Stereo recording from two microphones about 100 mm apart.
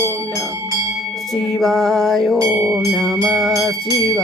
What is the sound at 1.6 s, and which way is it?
Mantra, 5° left (ahead or behind).